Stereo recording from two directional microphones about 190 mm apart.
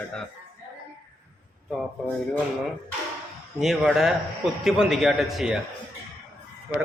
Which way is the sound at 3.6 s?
Centre (ahead or behind).